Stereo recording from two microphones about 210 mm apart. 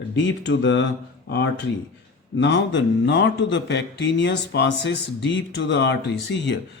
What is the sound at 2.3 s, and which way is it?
A man's voice, 60° left (ahead or behind).